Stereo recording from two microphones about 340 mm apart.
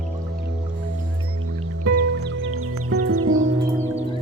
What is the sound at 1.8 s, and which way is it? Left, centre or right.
Music, right.